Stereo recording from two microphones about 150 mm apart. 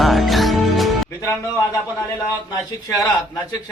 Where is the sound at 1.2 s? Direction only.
20° left (ahead or behind).